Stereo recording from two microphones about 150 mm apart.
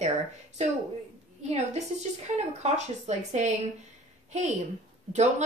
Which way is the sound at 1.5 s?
50° right (ahead or behind).